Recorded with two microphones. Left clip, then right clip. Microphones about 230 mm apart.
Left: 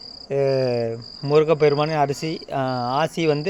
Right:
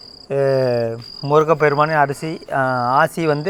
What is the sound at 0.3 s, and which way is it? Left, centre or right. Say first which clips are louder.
Speech: right 4 dB; centre.